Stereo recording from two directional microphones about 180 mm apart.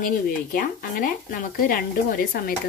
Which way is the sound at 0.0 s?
50° left (ahead or behind).